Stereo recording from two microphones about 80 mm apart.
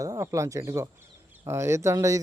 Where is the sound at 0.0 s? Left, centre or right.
Right.